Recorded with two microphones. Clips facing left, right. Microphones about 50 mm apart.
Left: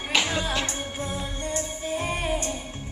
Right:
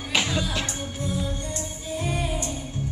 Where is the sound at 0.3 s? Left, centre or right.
Left.